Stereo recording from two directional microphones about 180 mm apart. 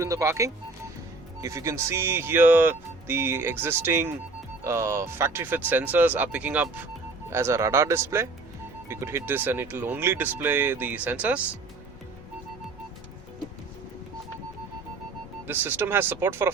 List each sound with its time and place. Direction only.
0.0 s speech: 15° right (ahead or behind)
15.4 s speech: 10° right (ahead or behind)